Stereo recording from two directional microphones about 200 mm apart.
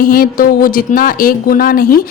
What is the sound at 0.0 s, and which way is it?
Music, 45° left (ahead or behind).